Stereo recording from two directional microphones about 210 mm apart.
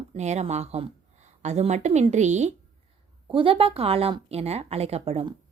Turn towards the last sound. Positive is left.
turn(degrees=-30)  # may be behind; listen again after turning